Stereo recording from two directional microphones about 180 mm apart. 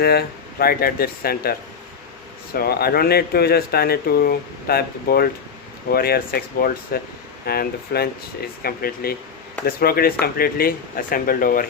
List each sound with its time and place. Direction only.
0.0 s speech: 60° left (ahead or behind)